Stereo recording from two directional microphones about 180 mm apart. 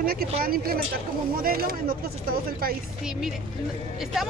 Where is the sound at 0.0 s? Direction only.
55° right (ahead or behind).